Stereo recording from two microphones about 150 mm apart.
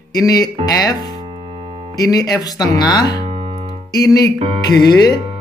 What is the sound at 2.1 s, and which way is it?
Speech, 25° left (ahead or behind).